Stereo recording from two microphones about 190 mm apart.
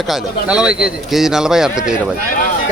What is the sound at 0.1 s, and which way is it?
Speech, 5° right (ahead or behind).